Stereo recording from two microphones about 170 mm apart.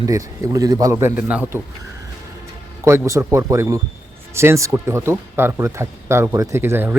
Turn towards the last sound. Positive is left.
turn(degrees=-15)  # may be behind; listen again after turning